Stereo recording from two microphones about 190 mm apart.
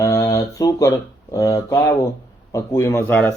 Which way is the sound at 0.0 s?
15° left (ahead or behind).